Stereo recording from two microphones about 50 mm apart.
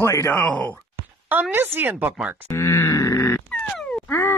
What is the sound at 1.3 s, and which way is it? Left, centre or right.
Speech, right.